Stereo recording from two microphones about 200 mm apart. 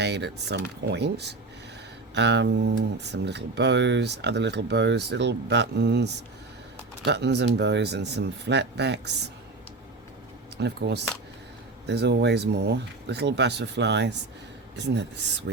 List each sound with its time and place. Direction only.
0.0 s speech: 60° right (ahead or behind)
10.6 s speech: 55° right (ahead or behind)